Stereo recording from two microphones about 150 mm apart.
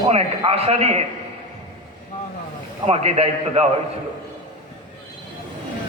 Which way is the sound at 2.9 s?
40° right (ahead or behind).